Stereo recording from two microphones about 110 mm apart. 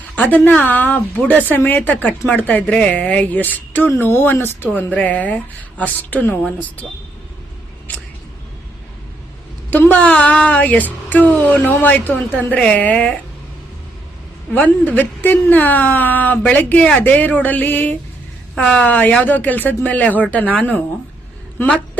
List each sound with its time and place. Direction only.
0.2 s a woman's voice: 15° left (ahead or behind)
7.9 s a sound: 15° left (ahead or behind)
9.6 s a woman's voice: 15° left (ahead or behind)
14.5 s a woman's voice: 15° left (ahead or behind)